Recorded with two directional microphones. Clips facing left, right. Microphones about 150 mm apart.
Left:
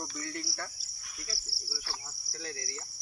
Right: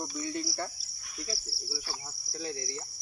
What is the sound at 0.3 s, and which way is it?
Cricket, 20° right (ahead or behind).